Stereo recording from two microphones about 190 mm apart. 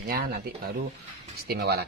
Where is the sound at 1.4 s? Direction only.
55° right (ahead or behind).